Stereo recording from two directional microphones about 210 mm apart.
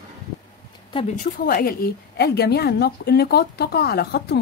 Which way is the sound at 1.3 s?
45° left (ahead or behind).